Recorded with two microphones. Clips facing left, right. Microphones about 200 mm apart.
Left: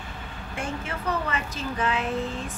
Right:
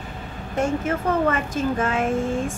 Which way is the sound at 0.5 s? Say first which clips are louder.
Right 10 dB; 45° right (ahead or behind).